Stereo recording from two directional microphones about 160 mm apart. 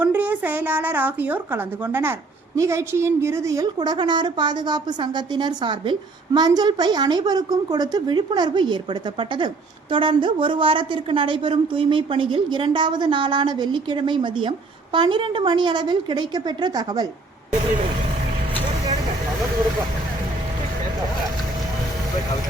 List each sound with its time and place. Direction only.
0.0 s a woman's voice: 10° right (ahead or behind)